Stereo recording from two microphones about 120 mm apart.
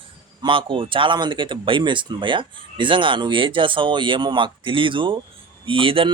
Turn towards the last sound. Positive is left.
turn(degrees=-50)  # may be behind; listen again after turning